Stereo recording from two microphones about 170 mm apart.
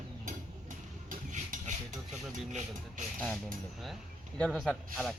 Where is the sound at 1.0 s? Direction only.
50° right (ahead or behind).